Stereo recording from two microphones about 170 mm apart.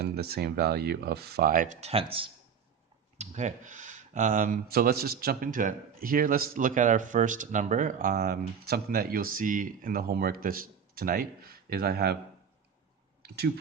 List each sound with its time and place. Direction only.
0.0 s speech: 65° right (ahead or behind); by 2.3 s 35° right (ahead or behind)
3.2 s speech: 45° right (ahead or behind); by 12.1 s 65° right (ahead or behind)
13.2 s speech: 65° right (ahead or behind)